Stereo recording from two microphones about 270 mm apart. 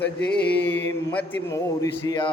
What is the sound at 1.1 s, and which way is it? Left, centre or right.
A man's voice, centre.